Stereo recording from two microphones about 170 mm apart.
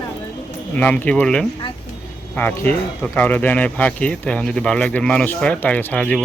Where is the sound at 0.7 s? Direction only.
10° left (ahead or behind).